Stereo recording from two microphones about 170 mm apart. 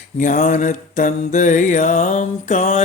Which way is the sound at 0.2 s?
45° left (ahead or behind).